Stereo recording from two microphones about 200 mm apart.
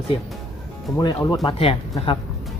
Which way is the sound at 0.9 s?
20° left (ahead or behind).